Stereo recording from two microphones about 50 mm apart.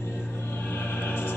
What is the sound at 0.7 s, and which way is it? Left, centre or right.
Music, left.